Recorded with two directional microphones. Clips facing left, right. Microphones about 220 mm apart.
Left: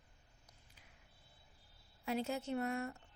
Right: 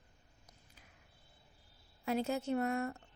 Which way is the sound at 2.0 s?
45° right (ahead or behind).